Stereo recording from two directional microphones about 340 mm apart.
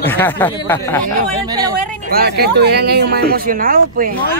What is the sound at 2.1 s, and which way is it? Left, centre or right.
Speech, right.